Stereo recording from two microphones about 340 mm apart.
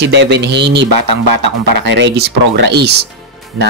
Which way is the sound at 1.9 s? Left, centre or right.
Right.